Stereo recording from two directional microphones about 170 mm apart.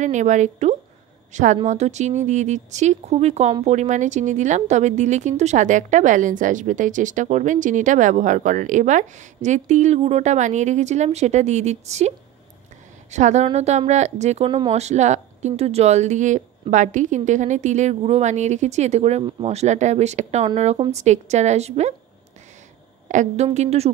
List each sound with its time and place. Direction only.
0.0 s speech: 45° right (ahead or behind)
13.1 s speech: 45° right (ahead or behind)
23.0 s speech: 45° right (ahead or behind)